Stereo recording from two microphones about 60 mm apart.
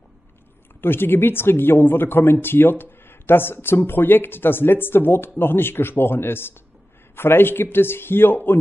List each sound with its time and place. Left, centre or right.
0.7 s speech: left